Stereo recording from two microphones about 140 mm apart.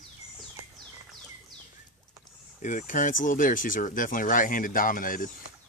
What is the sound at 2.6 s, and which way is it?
Speech, 65° left (ahead or behind).